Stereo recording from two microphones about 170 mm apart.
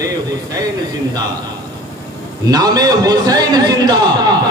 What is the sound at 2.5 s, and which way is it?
A man's voice, 20° right (ahead or behind).